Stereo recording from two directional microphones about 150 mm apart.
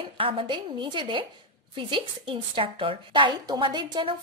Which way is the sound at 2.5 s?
35° right (ahead or behind).